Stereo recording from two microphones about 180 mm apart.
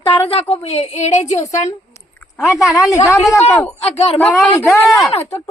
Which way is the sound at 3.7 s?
35° left (ahead or behind).